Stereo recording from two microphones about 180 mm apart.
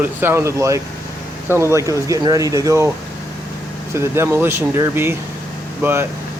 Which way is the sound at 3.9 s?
15° right (ahead or behind).